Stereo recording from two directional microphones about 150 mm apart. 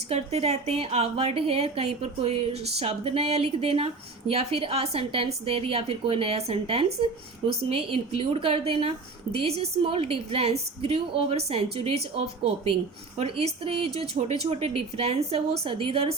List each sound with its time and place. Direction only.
0.1 s a woman's voice: 45° right (ahead or behind)
13.1 s a woman's voice: 40° right (ahead or behind)